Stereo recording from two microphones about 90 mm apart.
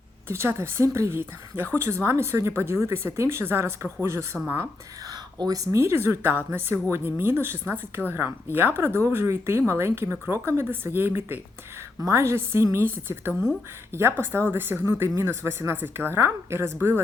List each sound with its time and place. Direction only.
0.3 s speech: 30° right (ahead or behind)
5.0 s a woman's voice: 45° right (ahead or behind); by 16.7 s 30° right (ahead or behind)